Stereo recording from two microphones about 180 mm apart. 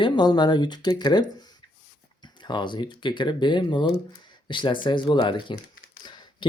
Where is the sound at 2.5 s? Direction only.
25° left (ahead or behind).